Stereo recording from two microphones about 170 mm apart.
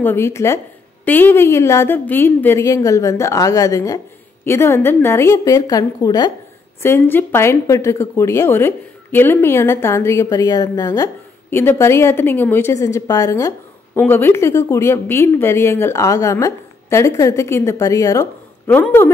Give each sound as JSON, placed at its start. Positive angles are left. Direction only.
{"t": 0.0, "sound": "a woman's voice", "side_deg": 15}